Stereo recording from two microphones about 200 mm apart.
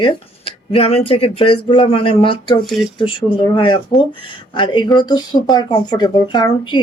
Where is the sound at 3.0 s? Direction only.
25° left (ahead or behind).